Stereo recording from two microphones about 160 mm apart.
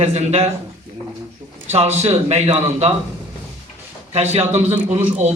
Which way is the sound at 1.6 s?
45° right (ahead or behind).